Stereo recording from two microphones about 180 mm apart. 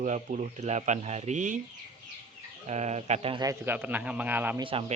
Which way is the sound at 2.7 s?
40° right (ahead or behind).